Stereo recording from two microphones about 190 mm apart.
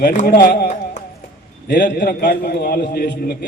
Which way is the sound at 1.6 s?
65° left (ahead or behind).